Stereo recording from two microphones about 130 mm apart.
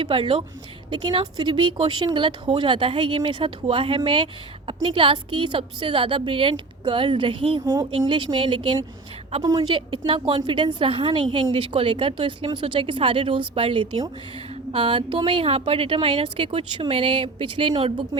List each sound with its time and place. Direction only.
0.0 s a woman's voice: 40° right (ahead or behind)
7.6 s speech: 25° right (ahead or behind)
7.9 s speech: 40° right (ahead or behind)
10.1 s a woman's voice: 45° right (ahead or behind)